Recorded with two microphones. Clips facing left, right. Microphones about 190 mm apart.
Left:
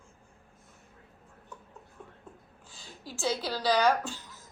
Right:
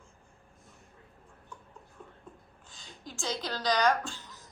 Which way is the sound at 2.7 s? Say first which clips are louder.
Left 2 dB; 5° left (ahead or behind).